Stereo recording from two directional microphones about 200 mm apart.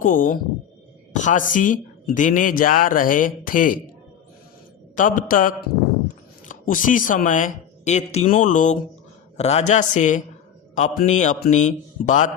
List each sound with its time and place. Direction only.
0.0 s speech: 45° left (ahead or behind)
4.9 s speech: 40° left (ahead or behind)